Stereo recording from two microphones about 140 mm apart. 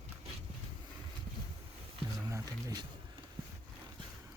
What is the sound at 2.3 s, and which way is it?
Speech, 25° right (ahead or behind).